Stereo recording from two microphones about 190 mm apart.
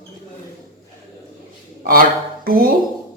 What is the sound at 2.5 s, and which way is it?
Speech, 50° right (ahead or behind).